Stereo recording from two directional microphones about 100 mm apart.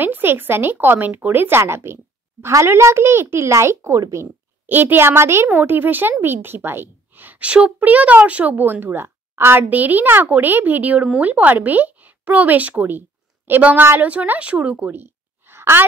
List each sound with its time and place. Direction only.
0.0 s speech: 20° right (ahead or behind)
4.6 s a woman's voice: 20° right (ahead or behind)